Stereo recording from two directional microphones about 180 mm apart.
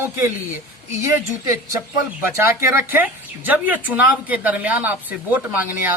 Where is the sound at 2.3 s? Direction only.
15° right (ahead or behind).